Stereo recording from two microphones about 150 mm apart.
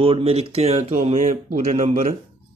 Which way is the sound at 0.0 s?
40° right (ahead or behind).